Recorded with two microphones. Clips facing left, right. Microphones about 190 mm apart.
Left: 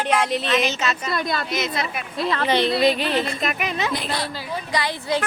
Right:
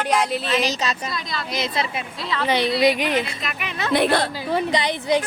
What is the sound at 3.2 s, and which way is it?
Speech, 45° left (ahead or behind).